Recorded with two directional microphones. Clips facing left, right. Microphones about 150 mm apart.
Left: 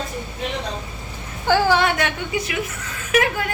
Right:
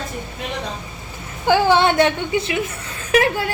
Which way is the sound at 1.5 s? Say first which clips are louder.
Right 2 dB; 20° right (ahead or behind).